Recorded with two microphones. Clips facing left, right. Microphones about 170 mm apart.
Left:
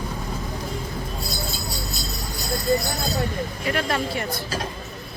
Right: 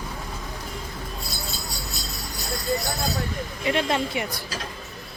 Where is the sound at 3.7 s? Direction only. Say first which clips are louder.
Right 2 dB; 20° right (ahead or behind).